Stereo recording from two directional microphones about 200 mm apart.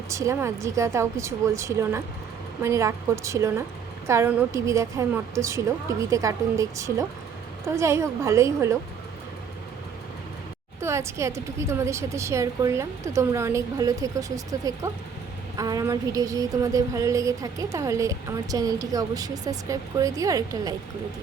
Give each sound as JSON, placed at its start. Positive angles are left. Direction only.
{"t": 0.1, "sound": "a woman's voice", "side_deg": -15}
{"t": 10.8, "sound": "a woman's voice", "side_deg": -15}